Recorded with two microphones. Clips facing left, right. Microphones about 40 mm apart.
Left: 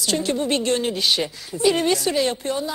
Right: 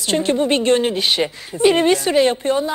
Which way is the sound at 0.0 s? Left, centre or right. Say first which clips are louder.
Right 5 dB; right.